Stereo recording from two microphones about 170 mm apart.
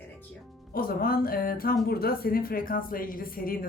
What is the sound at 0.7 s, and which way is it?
Speech, 60° left (ahead or behind).